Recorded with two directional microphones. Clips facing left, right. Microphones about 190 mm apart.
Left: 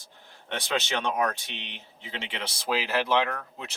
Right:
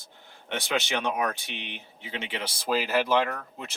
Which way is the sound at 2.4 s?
10° right (ahead or behind).